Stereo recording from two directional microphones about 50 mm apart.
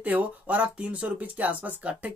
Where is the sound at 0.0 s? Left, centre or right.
Right.